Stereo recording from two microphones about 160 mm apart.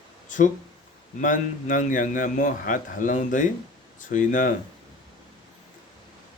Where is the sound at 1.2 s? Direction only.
55° left (ahead or behind).